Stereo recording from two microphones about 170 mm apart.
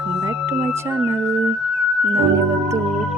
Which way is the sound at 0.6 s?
15° right (ahead or behind).